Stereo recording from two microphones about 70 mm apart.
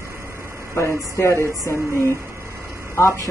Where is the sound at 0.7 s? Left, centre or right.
Left.